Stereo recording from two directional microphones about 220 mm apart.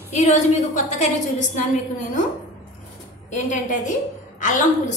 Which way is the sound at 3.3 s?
35° left (ahead or behind).